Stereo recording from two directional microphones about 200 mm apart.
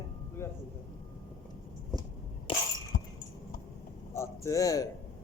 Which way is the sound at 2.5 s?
25° left (ahead or behind).